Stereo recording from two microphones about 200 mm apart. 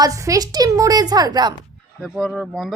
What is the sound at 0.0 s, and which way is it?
A woman's voice, 15° right (ahead or behind).